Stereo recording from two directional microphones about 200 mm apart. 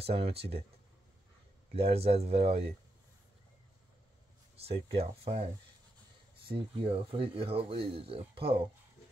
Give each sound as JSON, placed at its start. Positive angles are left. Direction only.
{"t": 0.0, "sound": "speech", "side_deg": -30}
{"t": 1.7, "sound": "speech", "side_deg": -30}
{"t": 4.6, "sound": "speech", "side_deg": -30}
{"t": 6.5, "sound": "speech", "side_deg": -25}